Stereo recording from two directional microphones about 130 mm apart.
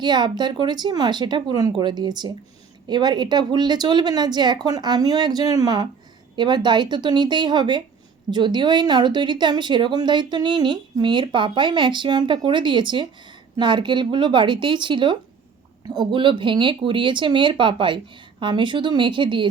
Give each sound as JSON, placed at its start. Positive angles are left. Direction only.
{"t": 0.0, "sound": "speech", "side_deg": -35}